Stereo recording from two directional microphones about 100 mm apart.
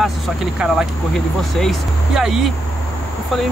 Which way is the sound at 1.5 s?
Centre (ahead or behind).